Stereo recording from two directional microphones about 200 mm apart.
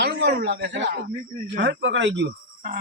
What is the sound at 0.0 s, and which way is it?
Speech, 55° right (ahead or behind).